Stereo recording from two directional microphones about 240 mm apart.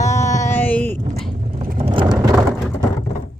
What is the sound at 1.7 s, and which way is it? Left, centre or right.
Vehicle, right.